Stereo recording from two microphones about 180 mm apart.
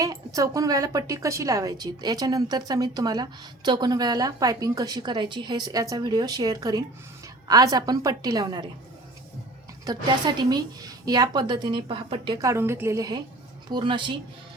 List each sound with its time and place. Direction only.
0.0 s a woman's voice: 20° right (ahead or behind)
9.8 s a woman's voice: 25° right (ahead or behind)